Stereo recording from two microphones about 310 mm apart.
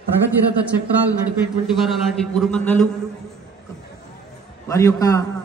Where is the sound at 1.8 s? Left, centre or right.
Centre.